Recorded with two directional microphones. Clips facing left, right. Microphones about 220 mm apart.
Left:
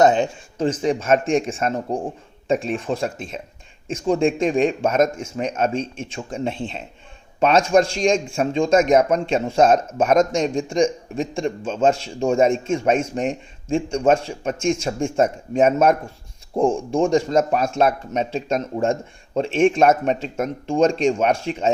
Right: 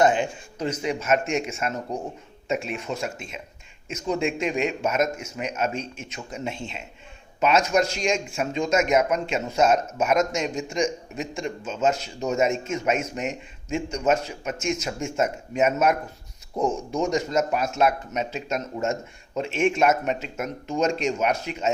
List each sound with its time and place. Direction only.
0.1 s a man's voice: 25° left (ahead or behind)